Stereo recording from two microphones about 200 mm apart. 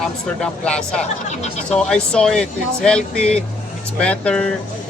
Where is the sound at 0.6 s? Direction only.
5° left (ahead or behind).